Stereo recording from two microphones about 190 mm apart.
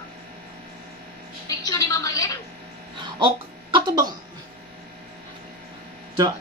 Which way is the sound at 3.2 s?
25° right (ahead or behind).